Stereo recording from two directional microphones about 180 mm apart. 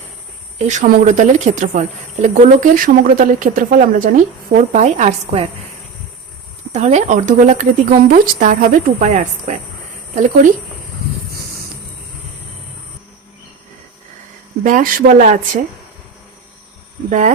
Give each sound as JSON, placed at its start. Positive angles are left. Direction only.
{"t": 0.6, "sound": "a woman's voice", "side_deg": -40}
{"t": 6.7, "sound": "speech", "side_deg": -40}
{"t": 14.6, "sound": "speech", "side_deg": -50}
{"t": 17.1, "sound": "speech", "side_deg": -45}